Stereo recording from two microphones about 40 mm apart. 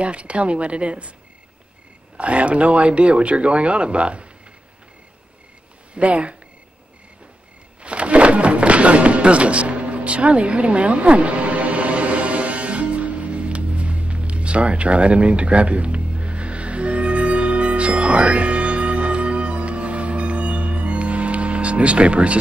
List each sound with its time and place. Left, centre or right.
0.0 s speech: right
2.1 s speech: right
5.9 s speech: right
7.8 s music: right